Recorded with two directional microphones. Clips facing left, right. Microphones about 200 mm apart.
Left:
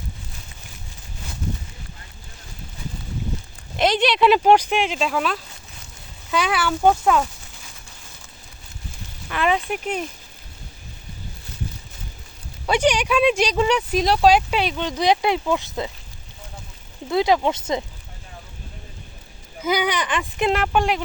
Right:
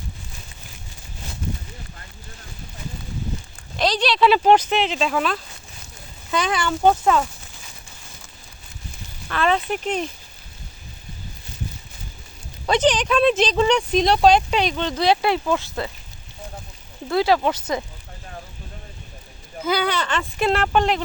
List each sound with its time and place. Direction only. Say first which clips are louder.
3.8 s speech: left 1 dB; 20° left (ahead or behind); by 7.2 s 5° left (ahead or behind)
9.3 s speech: right 1 dB; 15° left (ahead or behind)
12.6 s speech: right 1 dB; 10° left (ahead or behind)
17.1 s speech: even; 20° left (ahead or behind)
19.6 s speech: even; 15° left (ahead or behind)